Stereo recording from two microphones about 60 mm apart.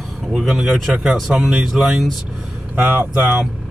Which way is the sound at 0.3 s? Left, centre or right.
Centre.